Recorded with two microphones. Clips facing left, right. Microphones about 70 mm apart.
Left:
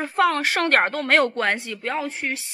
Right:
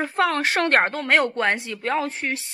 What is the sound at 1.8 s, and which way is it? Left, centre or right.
Speech, right.